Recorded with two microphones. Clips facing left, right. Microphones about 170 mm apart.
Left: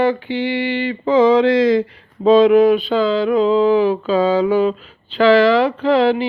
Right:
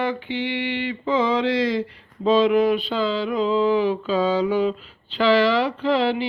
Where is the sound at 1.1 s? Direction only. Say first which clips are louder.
Left 9 dB; 90° left.